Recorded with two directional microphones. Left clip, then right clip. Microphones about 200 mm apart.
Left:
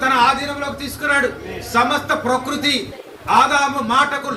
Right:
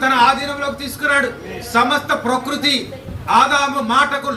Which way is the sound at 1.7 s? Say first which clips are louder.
Right 1 dB; 40° right (ahead or behind).